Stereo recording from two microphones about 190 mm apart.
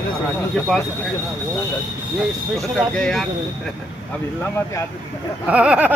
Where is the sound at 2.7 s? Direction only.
5° left (ahead or behind).